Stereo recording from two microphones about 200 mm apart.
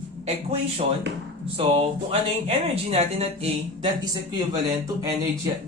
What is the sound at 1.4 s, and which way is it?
Speech, 30° right (ahead or behind).